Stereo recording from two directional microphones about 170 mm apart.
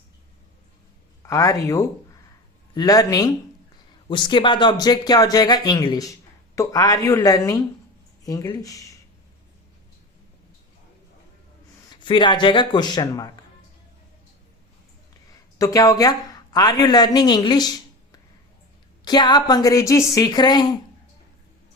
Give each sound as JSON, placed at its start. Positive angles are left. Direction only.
{"t": 1.3, "sound": "speech", "side_deg": 20}
{"t": 12.0, "sound": "speech", "side_deg": 25}
{"t": 15.5, "sound": "speech", "side_deg": 20}